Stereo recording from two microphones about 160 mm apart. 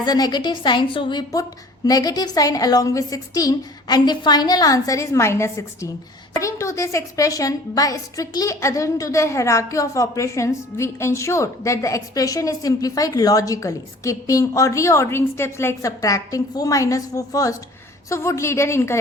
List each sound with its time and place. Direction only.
0.0 s a woman's voice: 25° left (ahead or behind)